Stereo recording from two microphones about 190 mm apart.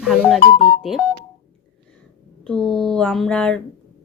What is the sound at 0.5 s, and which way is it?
Music, 25° left (ahead or behind).